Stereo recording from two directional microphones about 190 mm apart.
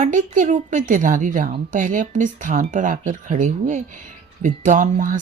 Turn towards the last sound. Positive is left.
turn(degrees=-45)  # may be behind; listen again after turning